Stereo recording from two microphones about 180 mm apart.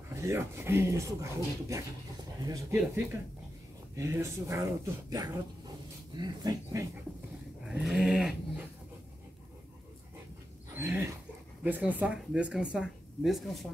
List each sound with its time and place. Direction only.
0.1 s speech: 15° right (ahead or behind)
3.9 s speech: 15° right (ahead or behind)
7.6 s a sound: 5° right (ahead or behind)
10.8 s dog: 10° right (ahead or behind)
11.6 s speech: 10° right (ahead or behind)